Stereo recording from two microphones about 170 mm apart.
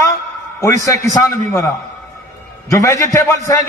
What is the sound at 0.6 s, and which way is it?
A man's voice, 20° left (ahead or behind).